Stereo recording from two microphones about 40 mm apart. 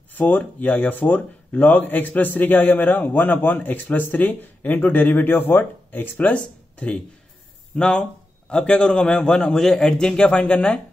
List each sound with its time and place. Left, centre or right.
0.1 s a sound: left
0.4 s speech: left
7.7 s a man's voice: left
10.2 s speech: left